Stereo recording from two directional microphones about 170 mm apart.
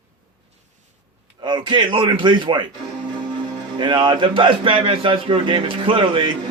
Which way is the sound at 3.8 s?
30° right (ahead or behind).